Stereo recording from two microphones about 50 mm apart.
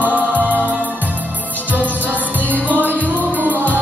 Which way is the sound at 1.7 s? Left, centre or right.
Right.